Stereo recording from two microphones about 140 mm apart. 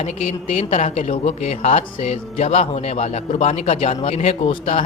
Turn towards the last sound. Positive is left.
turn(degrees=50)  # may be behind; listen again after turning